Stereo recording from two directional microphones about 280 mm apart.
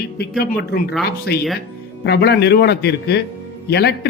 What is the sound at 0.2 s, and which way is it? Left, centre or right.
Speech, left.